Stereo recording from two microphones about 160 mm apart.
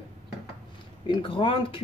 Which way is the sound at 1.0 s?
30° left (ahead or behind).